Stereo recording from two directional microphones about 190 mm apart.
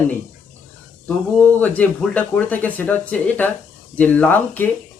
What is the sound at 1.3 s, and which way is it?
A man's voice, 10° left (ahead or behind).